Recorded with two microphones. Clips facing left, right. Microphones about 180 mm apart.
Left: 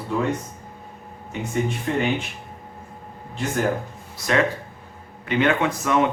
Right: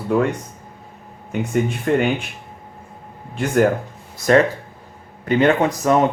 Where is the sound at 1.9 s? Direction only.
55° right (ahead or behind).